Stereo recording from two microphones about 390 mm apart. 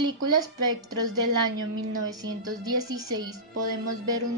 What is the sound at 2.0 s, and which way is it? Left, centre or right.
Speech, centre.